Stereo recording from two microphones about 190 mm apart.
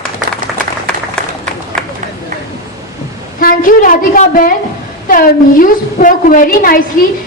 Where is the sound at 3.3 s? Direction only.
50° left (ahead or behind).